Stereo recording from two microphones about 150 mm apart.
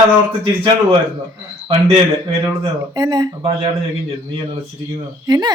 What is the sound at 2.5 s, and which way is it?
Speech, 25° right (ahead or behind).